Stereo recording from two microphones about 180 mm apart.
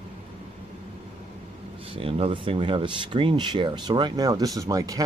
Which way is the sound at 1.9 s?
30° right (ahead or behind).